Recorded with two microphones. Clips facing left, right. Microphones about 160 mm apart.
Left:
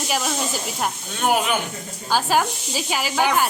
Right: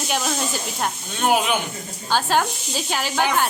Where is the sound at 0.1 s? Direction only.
Centre (ahead or behind).